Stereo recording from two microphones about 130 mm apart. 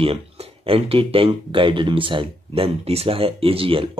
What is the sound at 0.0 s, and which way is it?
Speech, 45° right (ahead or behind).